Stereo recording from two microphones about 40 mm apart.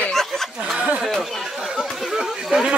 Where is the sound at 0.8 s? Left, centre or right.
Right.